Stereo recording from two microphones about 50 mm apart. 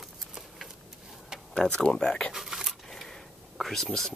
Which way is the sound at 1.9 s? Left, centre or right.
Centre.